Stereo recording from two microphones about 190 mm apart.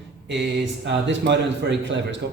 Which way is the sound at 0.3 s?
70° right (ahead or behind).